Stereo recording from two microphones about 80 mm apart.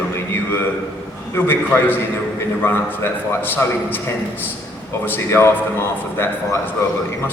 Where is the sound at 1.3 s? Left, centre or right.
Left.